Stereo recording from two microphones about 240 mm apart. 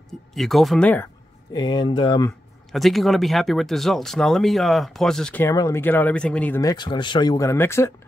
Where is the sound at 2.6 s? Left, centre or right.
Centre.